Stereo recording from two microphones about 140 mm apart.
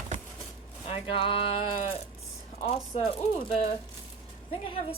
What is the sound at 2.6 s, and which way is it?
Speech, 50° left (ahead or behind).